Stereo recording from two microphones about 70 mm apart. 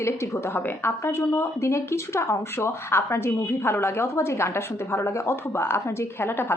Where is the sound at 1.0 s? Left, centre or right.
Left.